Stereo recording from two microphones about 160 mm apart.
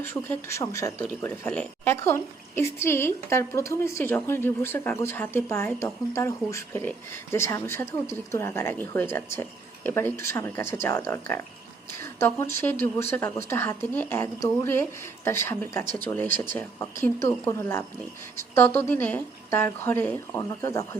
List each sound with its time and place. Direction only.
0.0 s speech: 15° left (ahead or behind)